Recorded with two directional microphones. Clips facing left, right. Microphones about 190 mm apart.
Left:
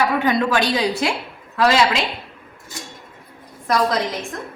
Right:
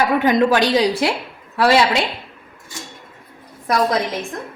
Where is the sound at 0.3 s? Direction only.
15° right (ahead or behind).